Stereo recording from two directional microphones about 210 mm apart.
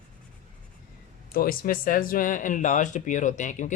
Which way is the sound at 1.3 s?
45° left (ahead or behind).